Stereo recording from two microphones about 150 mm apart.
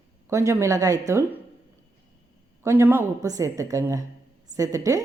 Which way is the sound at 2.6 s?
20° right (ahead or behind).